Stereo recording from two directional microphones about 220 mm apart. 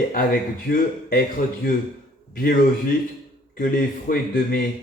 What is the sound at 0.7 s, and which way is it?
Speech, 45° left (ahead or behind).